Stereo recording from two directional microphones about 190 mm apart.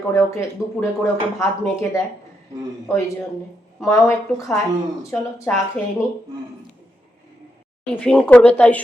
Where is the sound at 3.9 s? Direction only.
15° left (ahead or behind).